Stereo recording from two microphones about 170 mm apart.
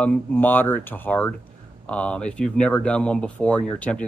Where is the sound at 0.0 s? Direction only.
5° left (ahead or behind).